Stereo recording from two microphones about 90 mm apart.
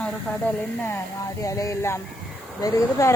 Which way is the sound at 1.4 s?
40° left (ahead or behind).